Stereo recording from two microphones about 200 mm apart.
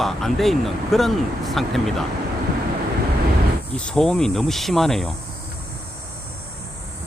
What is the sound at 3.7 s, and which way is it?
Speech, 5° left (ahead or behind).